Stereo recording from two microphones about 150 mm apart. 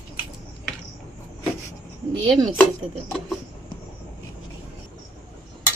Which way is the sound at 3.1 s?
5° left (ahead or behind).